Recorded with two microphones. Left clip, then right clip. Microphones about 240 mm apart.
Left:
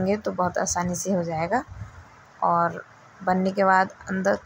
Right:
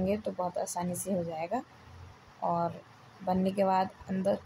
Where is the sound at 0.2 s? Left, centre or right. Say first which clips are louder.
Left 8 dB; centre.